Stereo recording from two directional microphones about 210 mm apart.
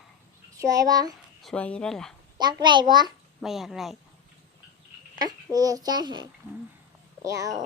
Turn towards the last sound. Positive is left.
turn(degrees=-15)  # may be behind; listen again after turning